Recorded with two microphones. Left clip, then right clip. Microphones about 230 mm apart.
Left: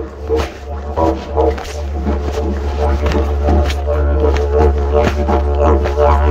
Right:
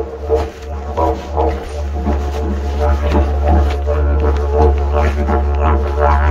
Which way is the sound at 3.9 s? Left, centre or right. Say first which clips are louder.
Left 5 dB; left.